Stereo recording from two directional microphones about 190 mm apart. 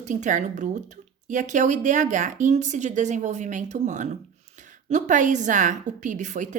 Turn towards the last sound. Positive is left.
turn(degrees=-40)  # may be behind; listen again after turning